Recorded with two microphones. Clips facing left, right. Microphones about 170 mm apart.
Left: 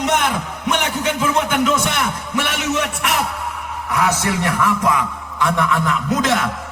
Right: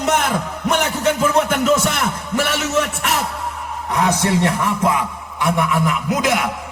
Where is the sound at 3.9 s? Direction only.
30° right (ahead or behind).